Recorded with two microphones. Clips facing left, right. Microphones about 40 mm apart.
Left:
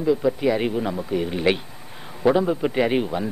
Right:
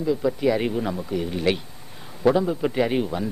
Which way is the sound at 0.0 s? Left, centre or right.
Centre.